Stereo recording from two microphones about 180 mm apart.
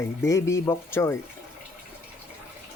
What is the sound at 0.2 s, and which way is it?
Speech, 15° left (ahead or behind).